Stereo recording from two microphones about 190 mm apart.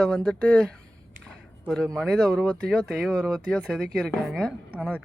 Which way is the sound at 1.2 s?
5° left (ahead or behind).